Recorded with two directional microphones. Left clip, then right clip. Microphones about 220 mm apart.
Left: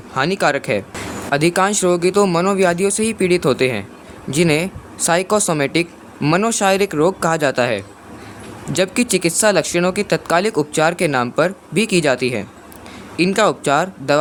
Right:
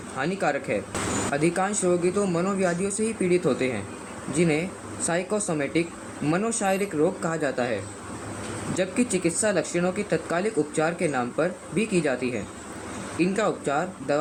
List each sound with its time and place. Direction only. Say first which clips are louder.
0.2 s speech: left 9 dB; 50° left (ahead or behind)